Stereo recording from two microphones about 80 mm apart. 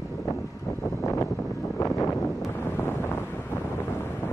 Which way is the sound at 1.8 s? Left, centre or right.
Left.